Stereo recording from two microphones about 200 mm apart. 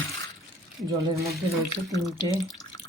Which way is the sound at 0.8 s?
15° right (ahead or behind).